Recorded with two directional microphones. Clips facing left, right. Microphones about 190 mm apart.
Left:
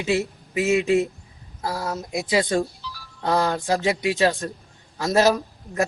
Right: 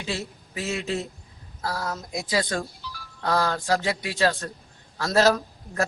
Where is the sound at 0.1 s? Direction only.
20° left (ahead or behind).